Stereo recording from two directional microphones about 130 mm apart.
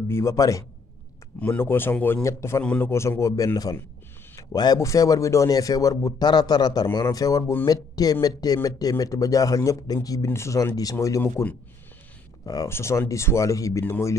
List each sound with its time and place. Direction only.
0.1 s a man's voice: 20° left (ahead or behind)
2.6 s speech: 10° left (ahead or behind)
2.9 s a man's voice: 20° left (ahead or behind)
12.4 s a man's voice: 25° left (ahead or behind)